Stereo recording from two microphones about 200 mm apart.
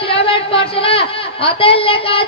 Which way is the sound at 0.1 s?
30° left (ahead or behind).